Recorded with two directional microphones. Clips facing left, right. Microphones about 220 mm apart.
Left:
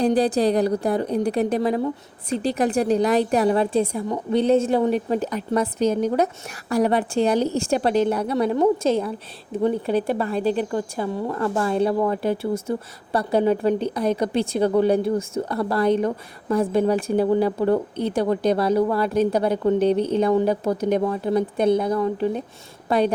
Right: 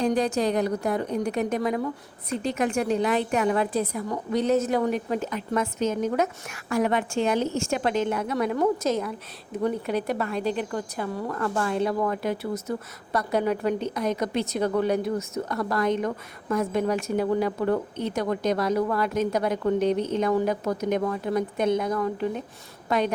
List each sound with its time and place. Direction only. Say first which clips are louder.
0.0 s a woman's voice: left 5 dB; 35° left (ahead or behind)